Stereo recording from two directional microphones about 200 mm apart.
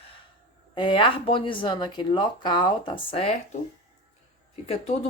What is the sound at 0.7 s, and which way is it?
Speech, 25° left (ahead or behind).